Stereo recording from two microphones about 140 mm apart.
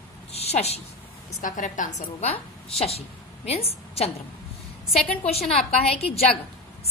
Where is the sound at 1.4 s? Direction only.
65° left (ahead or behind); by 4.1 s 45° left (ahead or behind).